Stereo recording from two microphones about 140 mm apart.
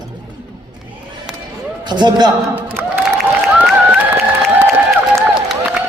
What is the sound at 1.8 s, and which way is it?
Speech, 30° right (ahead or behind).